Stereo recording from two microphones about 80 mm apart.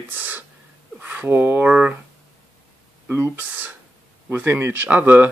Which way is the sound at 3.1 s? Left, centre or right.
Right.